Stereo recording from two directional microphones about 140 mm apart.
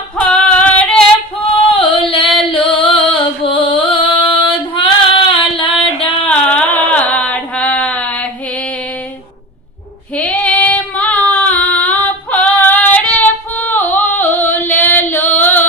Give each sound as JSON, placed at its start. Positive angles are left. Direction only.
{"t": 0.2, "sound": "female singing", "side_deg": 5}
{"t": 1.7, "sound": "female singing", "side_deg": 40}
{"t": 6.2, "sound": "a sound", "side_deg": 10}
{"t": 10.2, "sound": "female singing", "side_deg": 10}
{"t": 15.4, "sound": "singing", "side_deg": 15}